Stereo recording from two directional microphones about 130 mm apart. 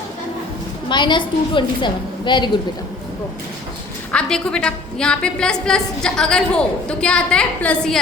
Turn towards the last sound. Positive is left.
turn(degrees=10)  # may be behind; listen again after turning